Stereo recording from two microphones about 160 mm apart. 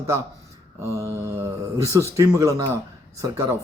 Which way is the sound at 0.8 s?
15° right (ahead or behind).